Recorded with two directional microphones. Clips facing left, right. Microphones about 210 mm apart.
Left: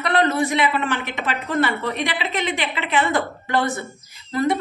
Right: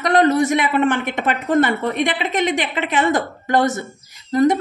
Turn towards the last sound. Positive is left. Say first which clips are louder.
# right 5 dB
turn(degrees=-45)  # may be behind; listen again after turning